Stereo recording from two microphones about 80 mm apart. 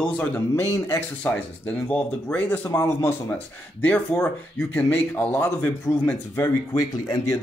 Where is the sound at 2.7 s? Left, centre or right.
Left.